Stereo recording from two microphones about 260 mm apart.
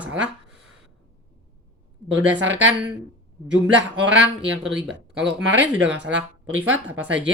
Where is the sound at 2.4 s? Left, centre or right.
Right.